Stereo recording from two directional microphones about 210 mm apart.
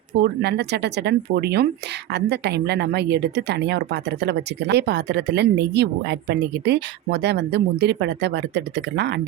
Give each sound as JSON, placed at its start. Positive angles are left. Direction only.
{"t": 0.2, "sound": "speech", "side_deg": -50}